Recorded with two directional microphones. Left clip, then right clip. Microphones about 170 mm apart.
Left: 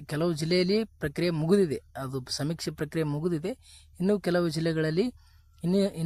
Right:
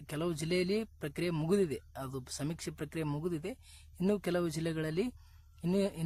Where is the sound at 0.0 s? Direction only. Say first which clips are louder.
Left 7 dB; 30° left (ahead or behind).